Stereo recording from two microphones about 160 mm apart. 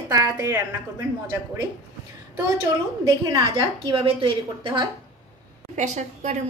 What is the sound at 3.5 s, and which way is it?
A woman's voice, 35° right (ahead or behind).